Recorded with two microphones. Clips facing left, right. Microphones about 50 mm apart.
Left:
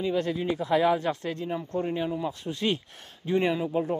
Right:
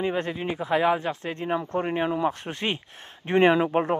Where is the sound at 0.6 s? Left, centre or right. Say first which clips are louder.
Right 2 dB; right.